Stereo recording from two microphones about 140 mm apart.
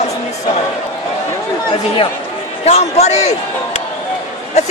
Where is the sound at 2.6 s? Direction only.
50° left (ahead or behind).